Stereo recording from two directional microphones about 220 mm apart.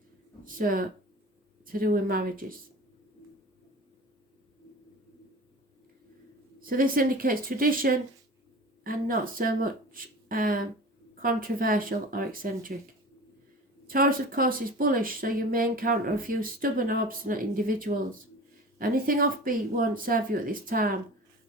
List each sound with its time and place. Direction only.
0.4 s speech: 40° right (ahead or behind)
6.6 s speech: 40° right (ahead or behind)
13.8 s speech: 40° right (ahead or behind)